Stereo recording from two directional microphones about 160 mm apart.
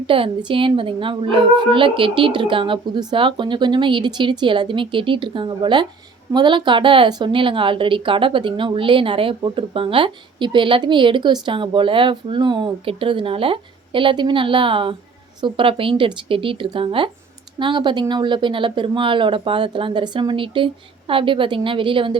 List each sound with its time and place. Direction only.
0.1 s a woman's voice: 35° right (ahead or behind)